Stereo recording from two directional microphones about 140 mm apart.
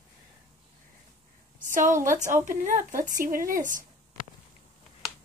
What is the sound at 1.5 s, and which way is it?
A woman's voice, 65° right (ahead or behind).